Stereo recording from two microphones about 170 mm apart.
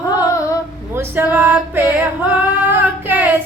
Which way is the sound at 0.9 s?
10° right (ahead or behind).